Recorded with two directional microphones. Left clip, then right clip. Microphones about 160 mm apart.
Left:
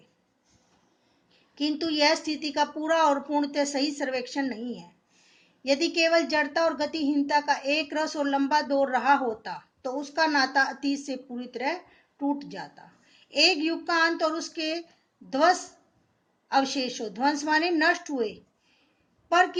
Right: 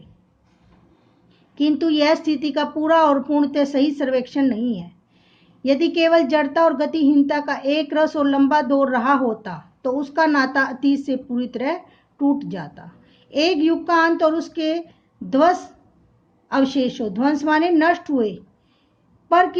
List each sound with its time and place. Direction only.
1.5 s a woman's voice: 30° right (ahead or behind)